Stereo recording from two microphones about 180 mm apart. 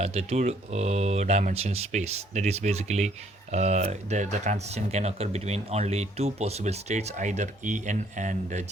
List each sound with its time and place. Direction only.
0.0 s speech: 35° right (ahead or behind)